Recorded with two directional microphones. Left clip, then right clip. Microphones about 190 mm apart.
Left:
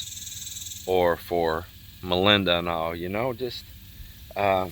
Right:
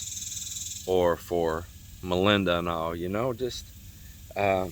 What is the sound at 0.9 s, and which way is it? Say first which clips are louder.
Speech: left 2 dB; 15° right (ahead or behind).